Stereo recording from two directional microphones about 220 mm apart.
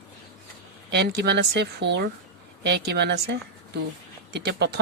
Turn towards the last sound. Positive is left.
turn(degrees=-50)  # may be behind; listen again after turning